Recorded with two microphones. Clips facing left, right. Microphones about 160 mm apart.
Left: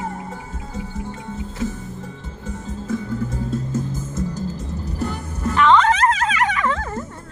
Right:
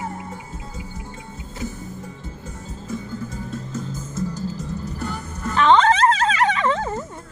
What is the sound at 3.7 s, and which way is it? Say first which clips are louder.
Music: left 5 dB; 55° left (ahead or behind).